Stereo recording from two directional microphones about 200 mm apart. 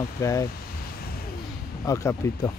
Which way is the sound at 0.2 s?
15° left (ahead or behind).